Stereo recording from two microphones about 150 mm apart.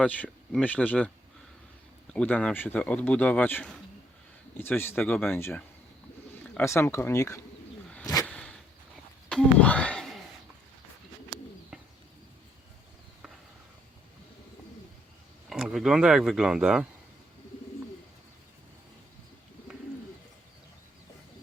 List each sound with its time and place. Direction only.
0.0 s speech: 10° left (ahead or behind)
2.1 s speech: 10° left (ahead or behind)
8.2 s a sound: 5° left (ahead or behind)
11.7 s bird: 5° right (ahead or behind)
15.4 s speech: centre (ahead or behind)